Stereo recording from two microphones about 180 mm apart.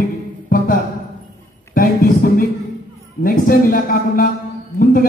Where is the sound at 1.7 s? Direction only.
55° left (ahead or behind).